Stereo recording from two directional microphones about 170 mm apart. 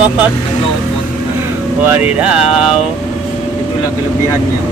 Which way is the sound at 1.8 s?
10° right (ahead or behind).